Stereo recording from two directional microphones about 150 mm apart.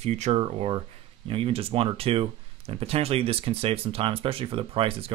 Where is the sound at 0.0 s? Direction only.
45° right (ahead or behind).